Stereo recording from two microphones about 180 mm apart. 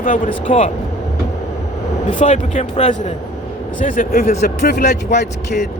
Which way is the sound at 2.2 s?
40° left (ahead or behind).